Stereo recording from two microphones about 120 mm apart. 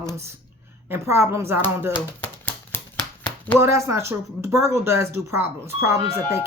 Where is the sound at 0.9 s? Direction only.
20° right (ahead or behind).